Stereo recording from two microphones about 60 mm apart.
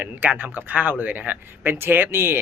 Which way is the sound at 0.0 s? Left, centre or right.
Right.